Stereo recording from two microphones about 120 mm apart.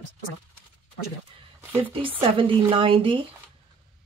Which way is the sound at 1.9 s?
45° right (ahead or behind).